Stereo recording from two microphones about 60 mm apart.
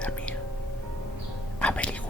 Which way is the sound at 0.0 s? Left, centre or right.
Left.